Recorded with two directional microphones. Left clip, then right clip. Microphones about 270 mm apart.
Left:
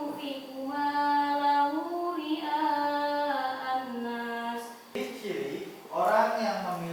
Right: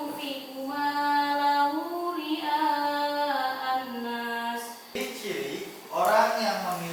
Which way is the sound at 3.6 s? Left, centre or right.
Centre.